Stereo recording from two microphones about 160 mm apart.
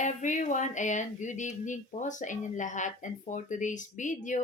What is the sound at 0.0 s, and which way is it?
Speech, 50° left (ahead or behind).